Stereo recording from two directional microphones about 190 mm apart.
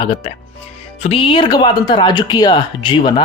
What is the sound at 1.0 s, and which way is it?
A man's voice, 30° left (ahead or behind).